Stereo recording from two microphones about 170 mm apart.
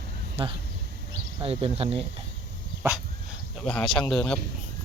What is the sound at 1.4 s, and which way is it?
Speech, 35° right (ahead or behind).